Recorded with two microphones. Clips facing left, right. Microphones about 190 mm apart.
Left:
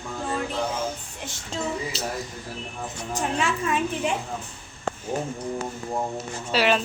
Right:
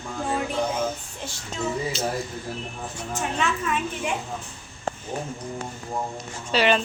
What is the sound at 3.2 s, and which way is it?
Speech, 30° left (ahead or behind).